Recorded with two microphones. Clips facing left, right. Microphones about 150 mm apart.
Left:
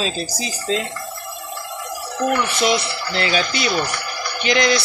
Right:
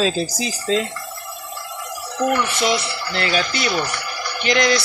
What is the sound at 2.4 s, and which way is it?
Speech, 20° left (ahead or behind).